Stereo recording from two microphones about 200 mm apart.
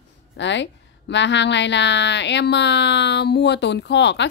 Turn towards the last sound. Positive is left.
turn(degrees=60)  # may be behind; listen again after turning